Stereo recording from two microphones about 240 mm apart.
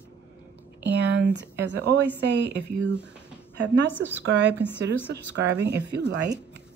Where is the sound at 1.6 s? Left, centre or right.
Right.